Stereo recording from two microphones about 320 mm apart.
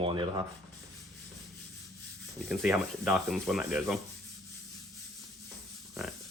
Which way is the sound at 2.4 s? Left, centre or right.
Centre.